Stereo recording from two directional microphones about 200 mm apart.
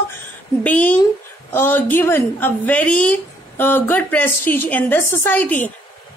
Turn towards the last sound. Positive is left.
turn(degrees=10)  # may be behind; listen again after turning